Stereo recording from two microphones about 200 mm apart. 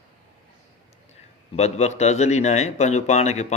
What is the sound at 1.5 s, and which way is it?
Speech, 35° left (ahead or behind).